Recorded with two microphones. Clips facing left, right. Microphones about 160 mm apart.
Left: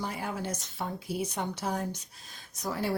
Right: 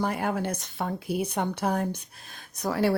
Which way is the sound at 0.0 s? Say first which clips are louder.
Right 7 dB; 60° right (ahead or behind).